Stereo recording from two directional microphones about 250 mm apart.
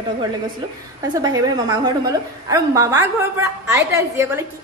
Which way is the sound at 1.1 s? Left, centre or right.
Centre.